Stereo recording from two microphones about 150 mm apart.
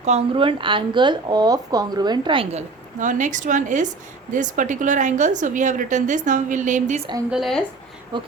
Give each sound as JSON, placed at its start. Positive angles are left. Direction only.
{"t": 0.0, "sound": "a woman's voice", "side_deg": -40}
{"t": 7.3, "sound": "speech", "side_deg": 0}
{"t": 8.1, "sound": "a sound", "side_deg": -30}